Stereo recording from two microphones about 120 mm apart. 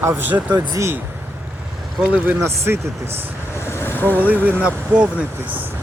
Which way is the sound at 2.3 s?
25° right (ahead or behind).